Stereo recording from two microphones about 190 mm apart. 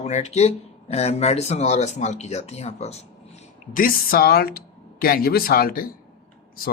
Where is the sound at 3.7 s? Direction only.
50° left (ahead or behind).